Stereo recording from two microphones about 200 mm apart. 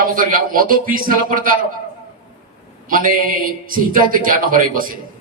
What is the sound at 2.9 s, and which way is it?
A man's voice, 45° right (ahead or behind).